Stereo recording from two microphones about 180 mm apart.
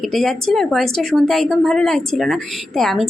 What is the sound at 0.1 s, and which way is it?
Speech, centre (ahead or behind).